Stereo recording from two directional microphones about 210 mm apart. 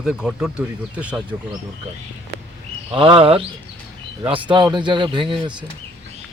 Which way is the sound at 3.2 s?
25° right (ahead or behind).